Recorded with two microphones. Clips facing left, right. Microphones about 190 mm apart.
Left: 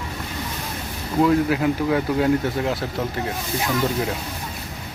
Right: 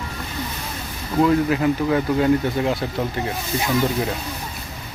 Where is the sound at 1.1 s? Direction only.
5° left (ahead or behind).